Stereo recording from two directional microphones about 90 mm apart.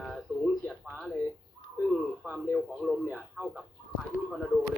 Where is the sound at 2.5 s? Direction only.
Centre (ahead or behind).